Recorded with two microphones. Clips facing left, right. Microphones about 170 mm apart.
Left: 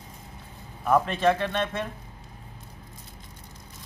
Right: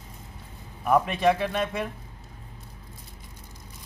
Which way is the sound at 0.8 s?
10° right (ahead or behind).